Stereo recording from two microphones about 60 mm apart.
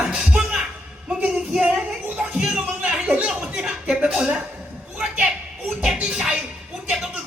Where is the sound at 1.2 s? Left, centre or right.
Centre.